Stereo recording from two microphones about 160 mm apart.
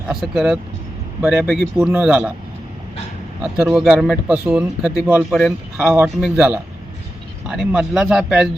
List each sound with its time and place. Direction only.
0.1 s speech: centre (ahead or behind)
3.4 s speech: 5° right (ahead or behind)